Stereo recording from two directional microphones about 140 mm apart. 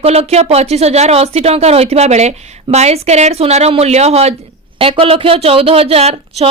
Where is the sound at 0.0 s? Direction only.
45° right (ahead or behind).